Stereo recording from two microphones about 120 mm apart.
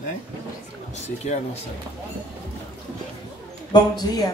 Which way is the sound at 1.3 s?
80° left.